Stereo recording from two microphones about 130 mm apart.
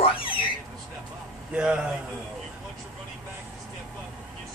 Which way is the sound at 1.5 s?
10° right (ahead or behind).